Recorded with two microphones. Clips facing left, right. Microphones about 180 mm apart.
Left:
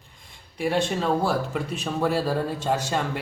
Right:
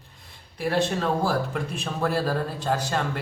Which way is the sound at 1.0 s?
5° left (ahead or behind).